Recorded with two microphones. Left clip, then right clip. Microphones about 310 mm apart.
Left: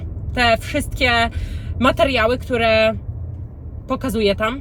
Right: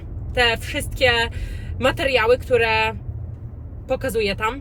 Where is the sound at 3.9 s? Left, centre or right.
Centre.